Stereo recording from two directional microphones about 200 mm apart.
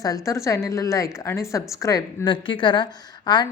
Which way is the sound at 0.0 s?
15° left (ahead or behind).